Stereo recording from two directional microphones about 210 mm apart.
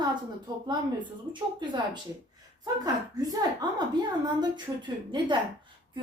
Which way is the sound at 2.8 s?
20° right (ahead or behind).